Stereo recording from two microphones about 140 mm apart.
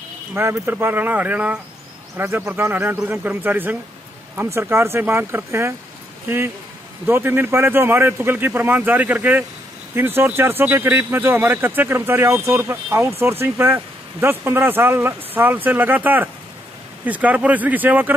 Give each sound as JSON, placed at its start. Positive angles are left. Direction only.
{"t": 0.3, "sound": "speech", "side_deg": -15}